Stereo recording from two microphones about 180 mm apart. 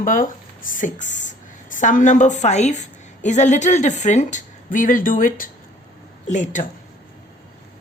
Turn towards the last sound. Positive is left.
turn(degrees=45)  # may be behind; listen again after turning